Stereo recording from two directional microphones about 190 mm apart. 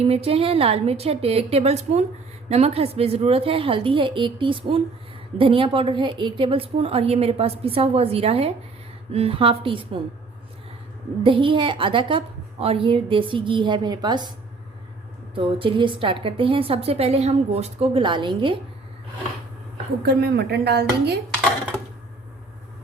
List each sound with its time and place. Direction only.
0.0 s a woman's voice: 30° right (ahead or behind)
11.2 s a woman's voice: 25° right (ahead or behind)
15.4 s a woman's voice: 25° right (ahead or behind)
20.0 s a woman's voice: 55° right (ahead or behind)